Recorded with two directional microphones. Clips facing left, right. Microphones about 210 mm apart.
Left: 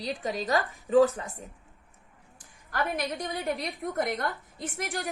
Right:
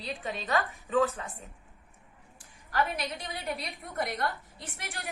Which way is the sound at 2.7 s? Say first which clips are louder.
Left 1 dB; 50° left (ahead or behind).